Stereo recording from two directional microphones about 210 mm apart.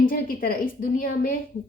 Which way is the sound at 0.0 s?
40° left (ahead or behind).